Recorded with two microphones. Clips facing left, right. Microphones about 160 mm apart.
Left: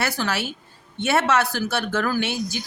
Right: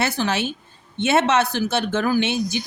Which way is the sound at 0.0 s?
20° right (ahead or behind).